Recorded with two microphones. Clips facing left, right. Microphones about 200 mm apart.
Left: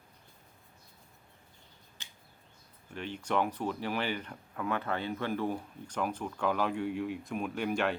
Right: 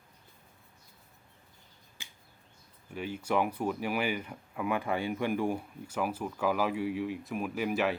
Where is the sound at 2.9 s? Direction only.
10° right (ahead or behind).